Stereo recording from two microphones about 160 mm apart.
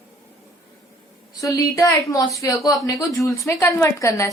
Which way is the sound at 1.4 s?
20° left (ahead or behind).